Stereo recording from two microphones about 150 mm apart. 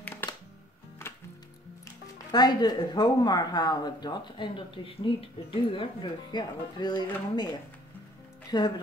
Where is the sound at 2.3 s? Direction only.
30° left (ahead or behind).